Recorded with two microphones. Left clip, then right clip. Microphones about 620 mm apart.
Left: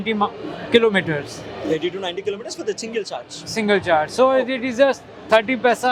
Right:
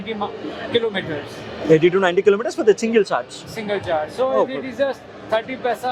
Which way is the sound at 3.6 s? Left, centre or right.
Left.